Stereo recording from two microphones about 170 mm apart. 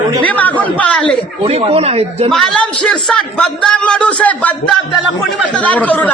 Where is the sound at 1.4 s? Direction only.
35° right (ahead or behind).